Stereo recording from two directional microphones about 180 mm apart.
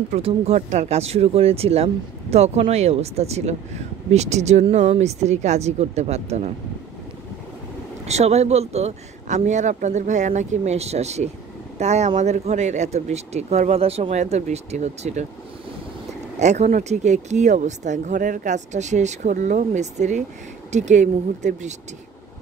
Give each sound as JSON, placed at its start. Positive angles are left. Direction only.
{"t": 0.1, "sound": "speech", "side_deg": -35}
{"t": 8.0, "sound": "speech", "side_deg": -35}
{"t": 16.3, "sound": "speech", "side_deg": -40}